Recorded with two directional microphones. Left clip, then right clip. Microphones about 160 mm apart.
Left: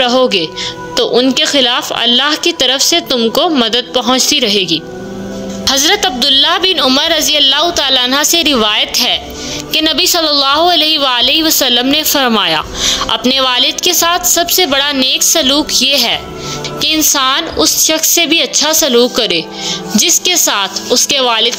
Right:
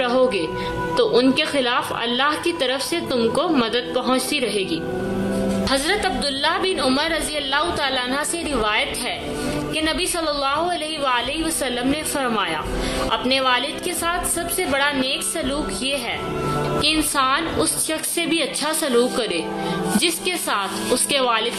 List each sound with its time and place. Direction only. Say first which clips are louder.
0.0 s music: left 8 dB; 40° left (ahead or behind)
0.9 s a woman's voice: left 7 dB; 40° left (ahead or behind); by 16.2 s 75° left (ahead or behind)
16.8 s a woman's voice: left 10 dB; 45° left (ahead or behind)